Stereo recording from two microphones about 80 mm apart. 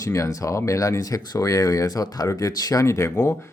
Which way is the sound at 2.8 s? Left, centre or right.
Left.